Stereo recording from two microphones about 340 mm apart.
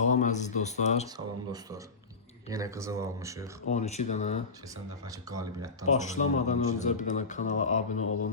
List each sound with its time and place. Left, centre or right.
0.0 s speech: left
2.5 s speech: centre
3.7 s a man's voice: centre
5.3 s speech: centre
5.8 s a man's voice: centre
8.0 s music: left